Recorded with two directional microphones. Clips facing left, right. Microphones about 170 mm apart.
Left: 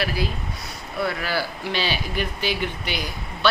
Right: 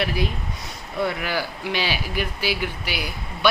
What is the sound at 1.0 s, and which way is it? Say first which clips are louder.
A man's voice: even; 15° right (ahead or behind).